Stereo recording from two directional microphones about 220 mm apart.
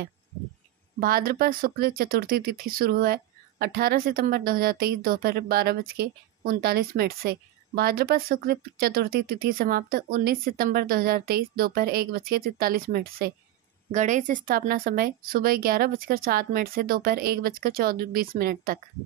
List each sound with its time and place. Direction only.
0.9 s speech: 40° right (ahead or behind)